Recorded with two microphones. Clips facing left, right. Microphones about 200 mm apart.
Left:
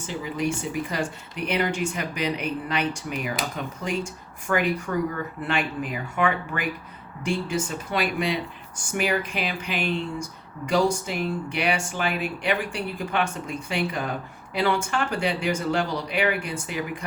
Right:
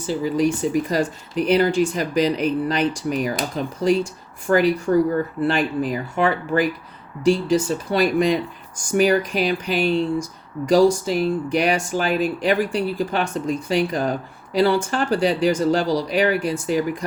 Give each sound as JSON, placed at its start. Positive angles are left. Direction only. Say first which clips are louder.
{"t": 0.0, "sound": "speech", "louder": "right 8 dB", "side_deg": -35}